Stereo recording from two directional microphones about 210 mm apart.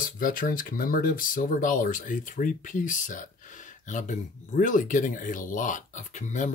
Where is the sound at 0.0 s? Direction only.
40° left (ahead or behind).